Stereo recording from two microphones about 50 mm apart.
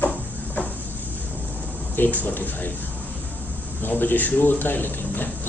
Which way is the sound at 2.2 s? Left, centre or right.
Left.